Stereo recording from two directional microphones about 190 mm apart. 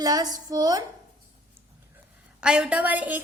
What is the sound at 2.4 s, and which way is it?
Speech, 5° right (ahead or behind).